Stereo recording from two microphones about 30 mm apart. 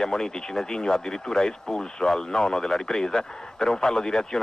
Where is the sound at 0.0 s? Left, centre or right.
Left.